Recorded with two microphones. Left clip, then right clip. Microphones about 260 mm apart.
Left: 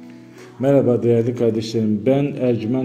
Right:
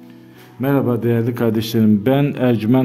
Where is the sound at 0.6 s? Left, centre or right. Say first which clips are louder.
Left 3 dB; centre.